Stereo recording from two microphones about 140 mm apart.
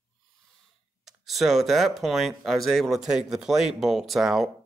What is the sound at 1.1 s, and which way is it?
Speech, centre (ahead or behind).